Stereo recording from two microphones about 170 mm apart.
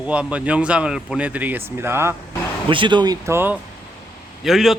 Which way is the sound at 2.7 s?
30° right (ahead or behind).